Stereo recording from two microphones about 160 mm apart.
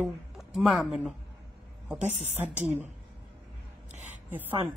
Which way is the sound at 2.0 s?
50° right (ahead or behind).